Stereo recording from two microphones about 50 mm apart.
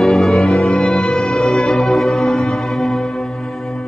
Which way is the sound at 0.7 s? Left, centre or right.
Centre.